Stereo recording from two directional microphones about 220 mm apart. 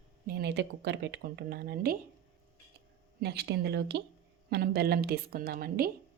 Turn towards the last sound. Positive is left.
turn(degrees=-45)  # may be behind; listen again after turning